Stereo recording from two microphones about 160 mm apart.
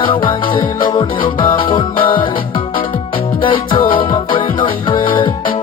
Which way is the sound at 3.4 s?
30° left (ahead or behind).